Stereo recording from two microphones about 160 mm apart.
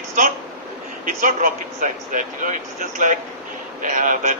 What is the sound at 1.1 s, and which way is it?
A man's voice, 55° right (ahead or behind).